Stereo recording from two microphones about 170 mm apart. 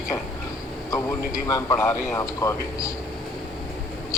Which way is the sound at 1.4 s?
15° left (ahead or behind).